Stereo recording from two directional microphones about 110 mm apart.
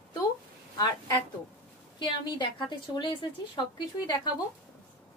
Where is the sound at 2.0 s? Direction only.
45° left (ahead or behind).